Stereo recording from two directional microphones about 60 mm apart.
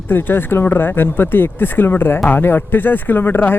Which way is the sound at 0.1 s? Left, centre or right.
Left.